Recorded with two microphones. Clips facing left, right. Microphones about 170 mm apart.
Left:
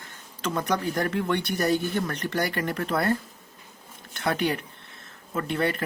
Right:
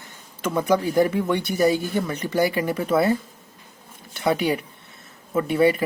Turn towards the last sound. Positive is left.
turn(degrees=-5)  # may be behind; listen again after turning